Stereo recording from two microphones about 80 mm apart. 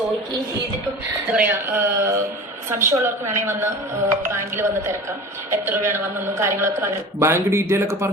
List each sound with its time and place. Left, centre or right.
1.3 s a woman's voice: right